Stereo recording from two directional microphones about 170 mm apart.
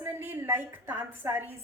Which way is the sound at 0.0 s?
10° right (ahead or behind).